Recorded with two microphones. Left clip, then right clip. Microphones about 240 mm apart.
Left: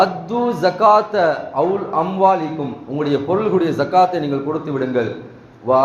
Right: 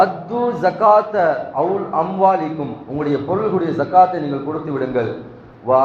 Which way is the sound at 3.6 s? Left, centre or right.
Left.